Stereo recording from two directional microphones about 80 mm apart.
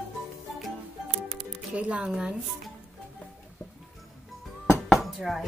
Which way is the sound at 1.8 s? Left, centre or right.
Centre.